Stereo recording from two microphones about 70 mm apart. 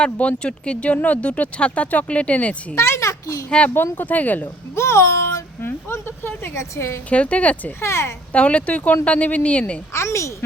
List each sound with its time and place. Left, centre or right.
0.0 s speech: centre
2.7 s a child's voice: left
3.9 s speech: left
4.7 s a child's voice: left
5.6 s a woman's voice: left
7.1 s speech: centre
7.8 s a child's voice: left
8.3 s speech: centre
9.9 s speech: left